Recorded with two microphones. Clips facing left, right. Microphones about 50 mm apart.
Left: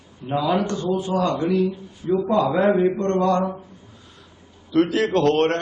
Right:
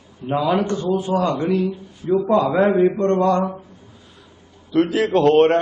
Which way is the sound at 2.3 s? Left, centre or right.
Centre.